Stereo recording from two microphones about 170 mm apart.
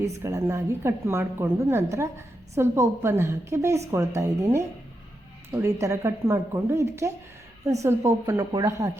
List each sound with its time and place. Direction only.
0.0 s a woman's voice: 20° right (ahead or behind)